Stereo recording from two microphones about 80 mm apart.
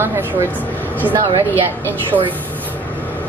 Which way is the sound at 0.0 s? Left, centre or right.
Right.